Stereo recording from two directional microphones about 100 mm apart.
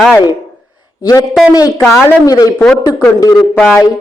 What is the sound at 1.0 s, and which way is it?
Speech, 40° left (ahead or behind).